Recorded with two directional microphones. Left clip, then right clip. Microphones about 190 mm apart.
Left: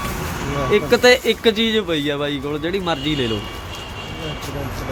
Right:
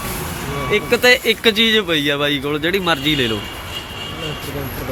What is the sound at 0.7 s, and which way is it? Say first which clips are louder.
Speech: even; 25° left (ahead or behind).